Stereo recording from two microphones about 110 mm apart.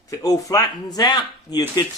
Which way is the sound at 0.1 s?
35° left (ahead or behind).